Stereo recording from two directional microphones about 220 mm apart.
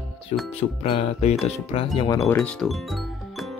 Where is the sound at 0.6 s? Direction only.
25° left (ahead or behind).